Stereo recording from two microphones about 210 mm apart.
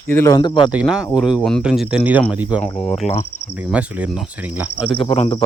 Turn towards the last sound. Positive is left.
turn(degrees=25)  # may be behind; listen again after turning